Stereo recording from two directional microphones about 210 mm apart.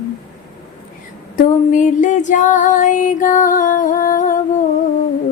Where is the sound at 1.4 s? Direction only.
35° left (ahead or behind).